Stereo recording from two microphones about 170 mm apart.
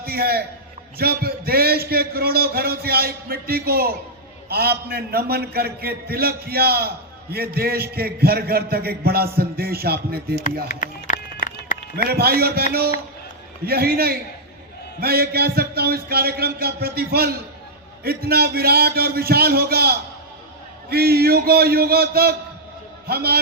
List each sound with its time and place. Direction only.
0.0 s a man's voice: 65° right (ahead or behind)
10.7 s music: 50° left (ahead or behind)
12.0 s a man's voice: 65° right (ahead or behind)